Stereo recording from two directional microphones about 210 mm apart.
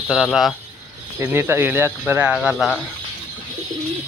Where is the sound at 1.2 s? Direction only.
10° right (ahead or behind).